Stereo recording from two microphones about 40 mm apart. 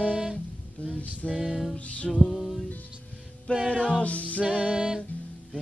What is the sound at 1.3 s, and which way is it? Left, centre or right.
Music, centre.